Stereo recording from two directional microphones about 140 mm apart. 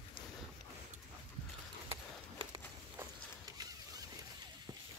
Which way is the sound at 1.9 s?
40° right (ahead or behind).